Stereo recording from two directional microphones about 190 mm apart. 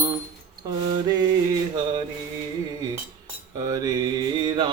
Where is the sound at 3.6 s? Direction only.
20° right (ahead or behind).